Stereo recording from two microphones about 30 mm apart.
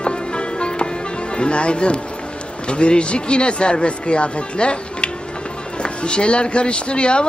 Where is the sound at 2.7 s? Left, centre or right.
Left.